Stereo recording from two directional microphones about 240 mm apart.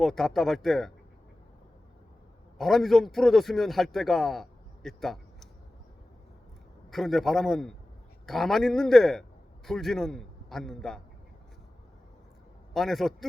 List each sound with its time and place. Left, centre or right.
0.0 s a man's voice: centre
2.6 s a man's voice: centre
6.9 s a man's voice: centre
12.7 s a man's voice: centre